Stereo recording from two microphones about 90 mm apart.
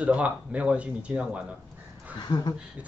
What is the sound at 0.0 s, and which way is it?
A man's voice, 15° right (ahead or behind).